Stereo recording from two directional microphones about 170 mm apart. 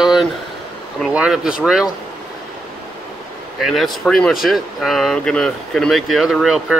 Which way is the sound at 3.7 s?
Centre (ahead or behind).